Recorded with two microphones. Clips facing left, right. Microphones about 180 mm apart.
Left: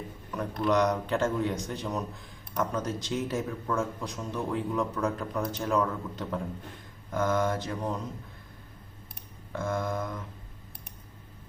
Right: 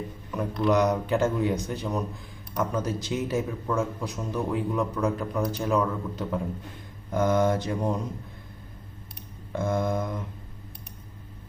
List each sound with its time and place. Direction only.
0.7 s a man's voice: 5° right (ahead or behind)
7.1 s a man's voice: 20° right (ahead or behind)
9.5 s mantra: 20° right (ahead or behind)